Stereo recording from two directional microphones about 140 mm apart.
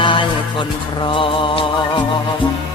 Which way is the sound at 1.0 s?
40° left (ahead or behind).